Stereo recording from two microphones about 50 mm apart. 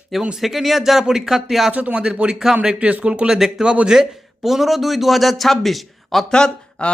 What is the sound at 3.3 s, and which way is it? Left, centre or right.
A man's voice, centre.